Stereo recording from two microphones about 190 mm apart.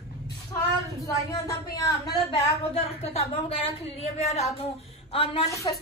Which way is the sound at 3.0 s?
35° left (ahead or behind).